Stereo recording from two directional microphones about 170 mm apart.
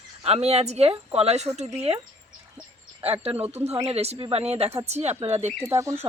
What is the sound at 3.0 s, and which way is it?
A woman's voice, 35° right (ahead or behind).